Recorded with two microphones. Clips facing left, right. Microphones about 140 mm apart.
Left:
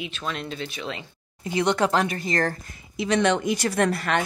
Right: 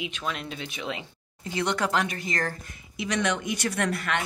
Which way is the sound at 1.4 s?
20° left (ahead or behind).